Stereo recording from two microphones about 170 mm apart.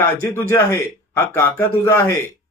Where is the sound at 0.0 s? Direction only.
15° left (ahead or behind).